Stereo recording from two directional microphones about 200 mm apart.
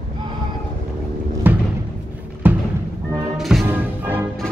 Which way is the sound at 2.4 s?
10° right (ahead or behind).